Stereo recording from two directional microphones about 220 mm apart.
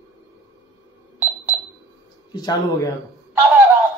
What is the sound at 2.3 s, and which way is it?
Speech, 15° left (ahead or behind).